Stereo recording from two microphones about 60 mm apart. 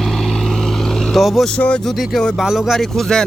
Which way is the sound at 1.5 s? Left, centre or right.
Centre.